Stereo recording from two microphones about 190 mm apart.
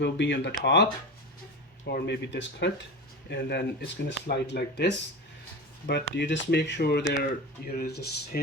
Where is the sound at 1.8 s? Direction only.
60° left (ahead or behind).